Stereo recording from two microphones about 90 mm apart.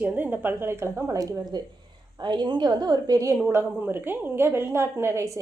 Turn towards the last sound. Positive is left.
turn(degrees=-35)  # may be behind; listen again after turning